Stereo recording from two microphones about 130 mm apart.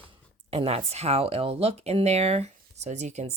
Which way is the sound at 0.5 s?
50° right (ahead or behind).